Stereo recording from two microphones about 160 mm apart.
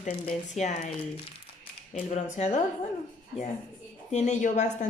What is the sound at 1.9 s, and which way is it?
Speech, 45° left (ahead or behind).